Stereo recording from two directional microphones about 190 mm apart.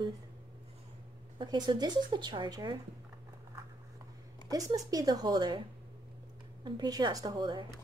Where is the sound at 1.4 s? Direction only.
25° right (ahead or behind).